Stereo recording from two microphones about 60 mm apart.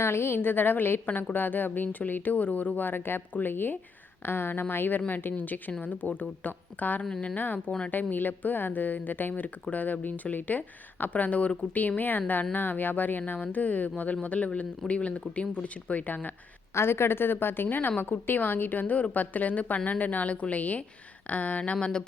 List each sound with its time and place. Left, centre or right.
0.0 s a woman's voice: left
16.7 s a woman's voice: left; by 22.0 s centre